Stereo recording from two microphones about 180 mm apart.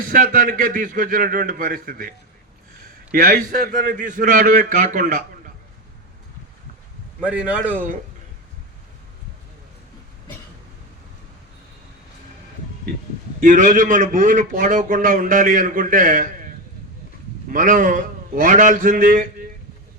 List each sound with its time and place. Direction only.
0.1 s a man's voice: 50° right (ahead or behind)
7.2 s a man's voice: 5° right (ahead or behind)
13.4 s a man's voice: 45° right (ahead or behind)
17.5 s a man's voice: 50° right (ahead or behind)